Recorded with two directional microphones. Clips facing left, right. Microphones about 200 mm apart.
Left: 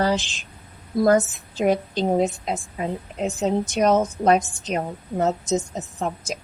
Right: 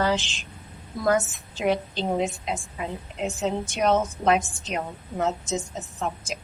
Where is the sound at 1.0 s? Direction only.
40° left (ahead or behind).